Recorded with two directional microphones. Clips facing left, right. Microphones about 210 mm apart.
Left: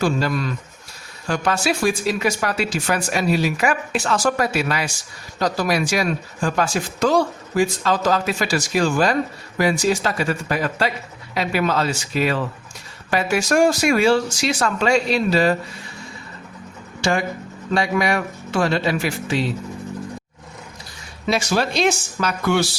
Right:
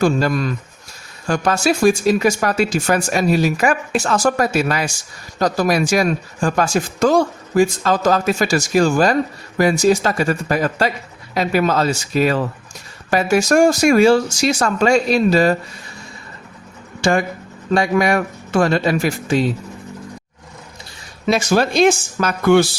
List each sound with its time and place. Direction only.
0.0 s speech: 45° right (ahead or behind)
17.0 s speech: 50° right (ahead or behind)
21.2 s speech: 50° right (ahead or behind)